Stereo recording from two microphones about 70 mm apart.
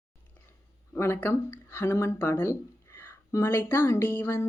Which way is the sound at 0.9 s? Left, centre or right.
Left.